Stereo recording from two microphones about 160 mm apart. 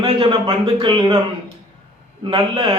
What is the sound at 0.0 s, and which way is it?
A man's voice, 35° right (ahead or behind).